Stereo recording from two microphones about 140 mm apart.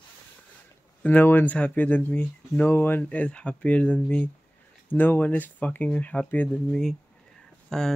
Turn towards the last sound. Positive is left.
turn(degrees=5)  # may be behind; listen again after turning